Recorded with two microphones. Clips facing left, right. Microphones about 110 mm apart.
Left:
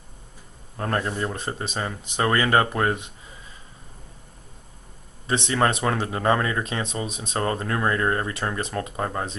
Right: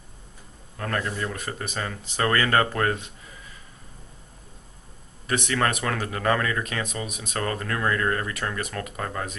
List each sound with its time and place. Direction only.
0.7 s speech: 30° left (ahead or behind)
5.2 s speech: 25° left (ahead or behind)